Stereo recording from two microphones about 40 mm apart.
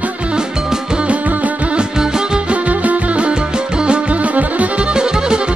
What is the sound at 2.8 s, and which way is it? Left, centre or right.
Music, right.